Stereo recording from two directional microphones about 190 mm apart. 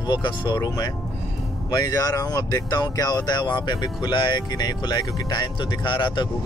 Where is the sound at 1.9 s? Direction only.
20° left (ahead or behind).